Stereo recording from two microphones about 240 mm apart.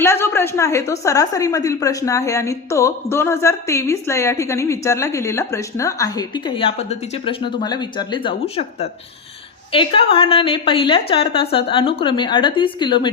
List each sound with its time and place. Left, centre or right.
0.0 s a woman's voice: centre